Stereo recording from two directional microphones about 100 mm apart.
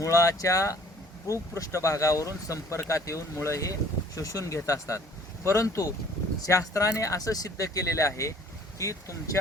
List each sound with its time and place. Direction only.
0.0 s speech: 30° left (ahead or behind)